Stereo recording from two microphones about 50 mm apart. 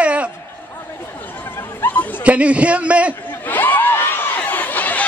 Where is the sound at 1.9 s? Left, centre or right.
Left.